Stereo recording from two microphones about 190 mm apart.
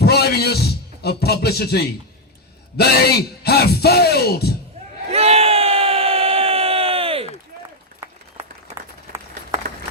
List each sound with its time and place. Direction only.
0.0 s speech: 60° left (ahead or behind)
5.1 s crowd: 30° right (ahead or behind)
9.7 s run: 50° right (ahead or behind)